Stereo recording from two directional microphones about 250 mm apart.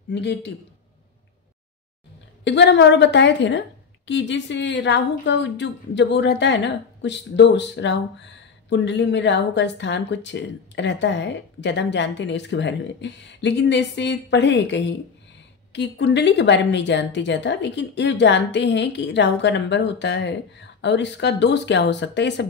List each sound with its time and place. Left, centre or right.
0.1 s a woman's voice: left
2.4 s a woman's voice: left